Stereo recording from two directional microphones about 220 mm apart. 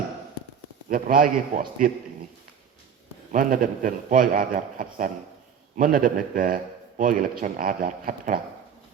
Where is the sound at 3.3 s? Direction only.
40° right (ahead or behind).